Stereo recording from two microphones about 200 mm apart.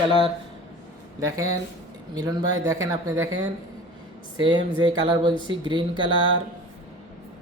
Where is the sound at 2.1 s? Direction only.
20° right (ahead or behind).